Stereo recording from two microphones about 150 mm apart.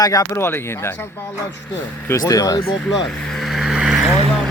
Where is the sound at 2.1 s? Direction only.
20° left (ahead or behind).